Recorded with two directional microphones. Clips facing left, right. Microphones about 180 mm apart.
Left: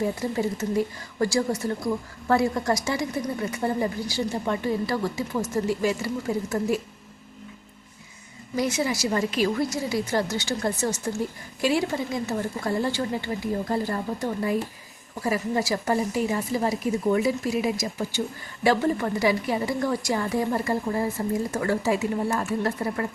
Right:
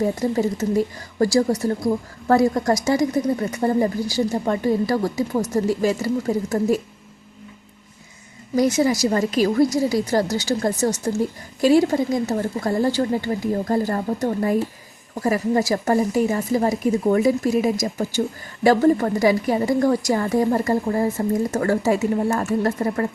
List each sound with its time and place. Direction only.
0.2 s speech: 40° right (ahead or behind)
8.5 s a woman's voice: 40° right (ahead or behind)